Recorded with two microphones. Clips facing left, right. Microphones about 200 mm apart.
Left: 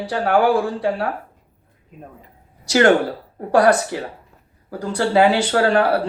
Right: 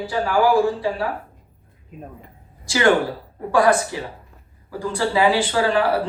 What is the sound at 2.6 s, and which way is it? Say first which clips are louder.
Speech: left 3 dB; 55° left (ahead or behind).